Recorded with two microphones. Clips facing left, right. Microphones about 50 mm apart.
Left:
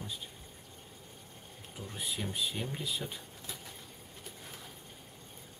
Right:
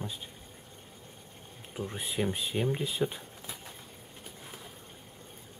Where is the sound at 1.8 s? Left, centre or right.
Right.